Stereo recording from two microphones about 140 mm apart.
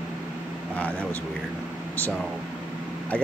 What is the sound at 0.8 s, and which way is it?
Speech, 10° left (ahead or behind).